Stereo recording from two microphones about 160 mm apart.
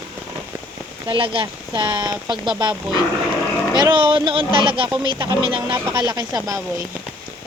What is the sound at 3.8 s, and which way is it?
Speech, 30° right (ahead or behind).